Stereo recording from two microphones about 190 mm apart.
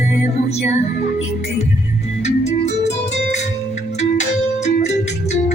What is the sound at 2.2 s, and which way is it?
Music, 35° left (ahead or behind).